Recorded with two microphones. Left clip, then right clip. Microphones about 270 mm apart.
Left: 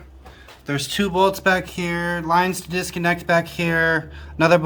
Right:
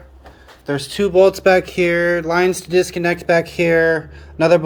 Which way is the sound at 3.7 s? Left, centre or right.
Left.